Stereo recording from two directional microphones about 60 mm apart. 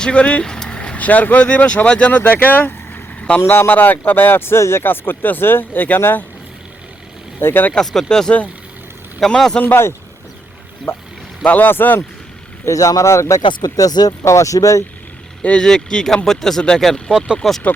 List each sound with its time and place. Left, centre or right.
0.0 s speech: centre
3.2 s vehicle: left
3.4 s speech: left
3.7 s speech: left
7.3 s speech: left
7.7 s speech: centre
10.9 s speech: left
11.4 s speech: left
12.6 s speech: left
13.1 s speech: left
14.3 s speech: left
15.4 s speech: centre
17.4 s speech: centre